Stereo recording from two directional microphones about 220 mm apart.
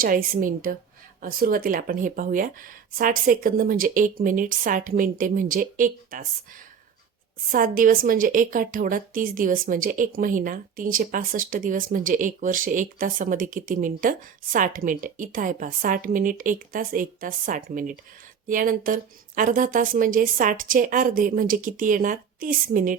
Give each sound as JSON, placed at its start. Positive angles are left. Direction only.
{"t": 0.0, "sound": "speech", "side_deg": -40}